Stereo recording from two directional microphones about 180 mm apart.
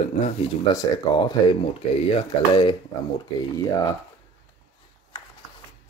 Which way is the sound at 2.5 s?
25° left (ahead or behind).